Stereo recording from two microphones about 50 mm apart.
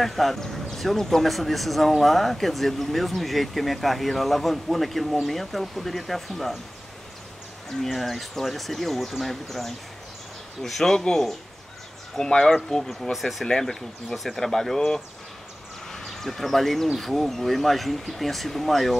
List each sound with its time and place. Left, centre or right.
0.0 s speech: centre
7.8 s speech: centre
13.5 s speech: centre